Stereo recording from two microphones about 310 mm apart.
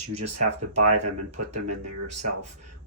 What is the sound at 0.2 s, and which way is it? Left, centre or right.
Speech, right.